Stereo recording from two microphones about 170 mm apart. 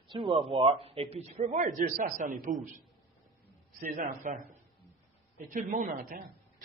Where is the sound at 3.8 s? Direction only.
50° right (ahead or behind).